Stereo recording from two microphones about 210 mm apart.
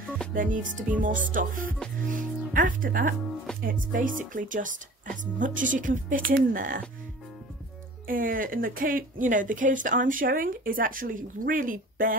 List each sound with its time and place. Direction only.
0.3 s speech: 40° right (ahead or behind)
3.5 s speech: 5° left (ahead or behind)
3.9 s speech: 40° right (ahead or behind)
8.1 s speech: 40° right (ahead or behind)